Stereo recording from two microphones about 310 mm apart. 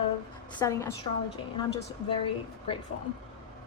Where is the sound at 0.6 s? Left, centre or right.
Centre.